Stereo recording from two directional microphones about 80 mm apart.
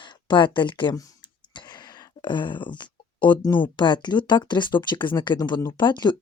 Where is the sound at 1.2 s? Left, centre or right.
Left.